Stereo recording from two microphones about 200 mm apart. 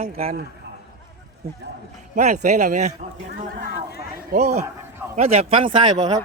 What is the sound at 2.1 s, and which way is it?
Speech, 40° right (ahead or behind).